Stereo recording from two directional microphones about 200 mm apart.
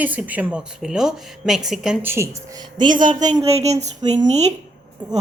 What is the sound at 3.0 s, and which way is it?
Speech, 40° right (ahead or behind).